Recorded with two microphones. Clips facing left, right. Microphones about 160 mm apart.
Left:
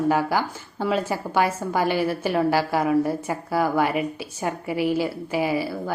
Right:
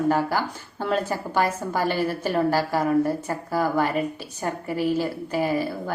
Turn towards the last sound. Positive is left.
turn(degrees=10)  # may be behind; listen again after turning